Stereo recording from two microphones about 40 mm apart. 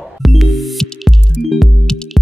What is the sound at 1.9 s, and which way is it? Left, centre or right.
Music, centre.